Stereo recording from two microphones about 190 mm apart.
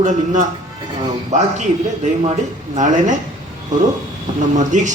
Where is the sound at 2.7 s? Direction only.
40° right (ahead or behind).